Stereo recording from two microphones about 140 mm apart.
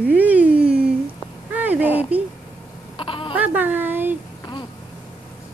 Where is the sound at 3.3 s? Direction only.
10° right (ahead or behind).